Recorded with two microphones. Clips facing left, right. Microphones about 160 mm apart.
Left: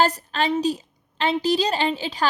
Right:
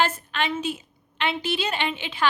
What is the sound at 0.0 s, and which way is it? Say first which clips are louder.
A woman's voice: left 4 dB; 35° left (ahead or behind).